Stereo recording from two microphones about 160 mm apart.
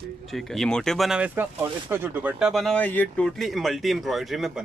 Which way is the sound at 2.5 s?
Centre (ahead or behind).